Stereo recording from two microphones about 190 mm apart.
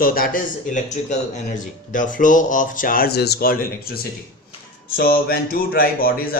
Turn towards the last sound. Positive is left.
turn(degrees=50)  # may be behind; listen again after turning